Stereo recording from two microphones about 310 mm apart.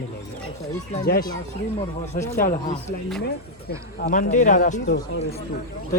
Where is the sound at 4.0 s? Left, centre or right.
Left.